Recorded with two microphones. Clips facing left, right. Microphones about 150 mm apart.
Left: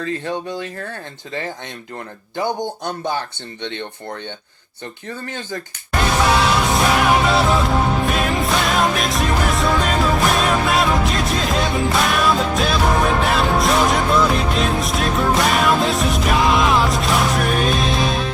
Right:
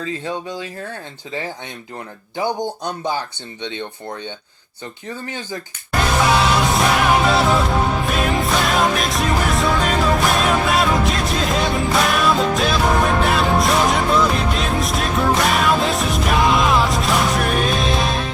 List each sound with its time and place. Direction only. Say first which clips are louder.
0.0 s speech: left 1 dB; 60° left (ahead or behind)
3.1 s speech: even; 55° left (ahead or behind)
5.9 s music: even; centre (ahead or behind)